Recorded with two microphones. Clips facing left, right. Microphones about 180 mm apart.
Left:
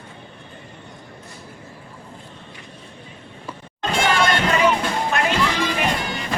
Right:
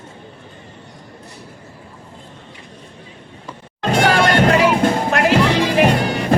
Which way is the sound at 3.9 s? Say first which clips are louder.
Right 5 dB; 60° right (ahead or behind).